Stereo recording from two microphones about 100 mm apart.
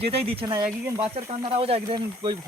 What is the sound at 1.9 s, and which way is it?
Speech, 50° right (ahead or behind).